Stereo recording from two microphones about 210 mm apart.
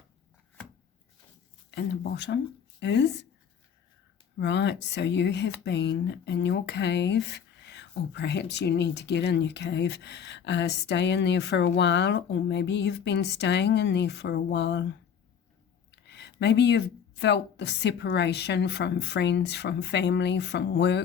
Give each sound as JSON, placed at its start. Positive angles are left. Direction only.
{"t": 1.7, "sound": "speech", "side_deg": 55}
{"t": 4.4, "sound": "speech", "side_deg": 55}